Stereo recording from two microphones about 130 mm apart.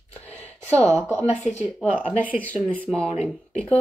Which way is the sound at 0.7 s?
20° right (ahead or behind).